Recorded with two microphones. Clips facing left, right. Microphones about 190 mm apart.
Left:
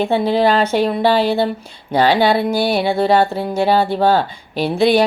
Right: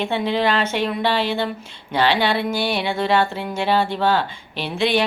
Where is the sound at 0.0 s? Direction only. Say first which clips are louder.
Left 6 dB; 35° left (ahead or behind).